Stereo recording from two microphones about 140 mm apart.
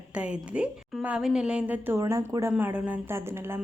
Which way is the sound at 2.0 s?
25° right (ahead or behind).